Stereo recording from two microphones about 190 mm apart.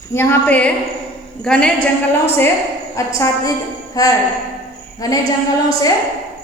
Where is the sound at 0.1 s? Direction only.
10° left (ahead or behind).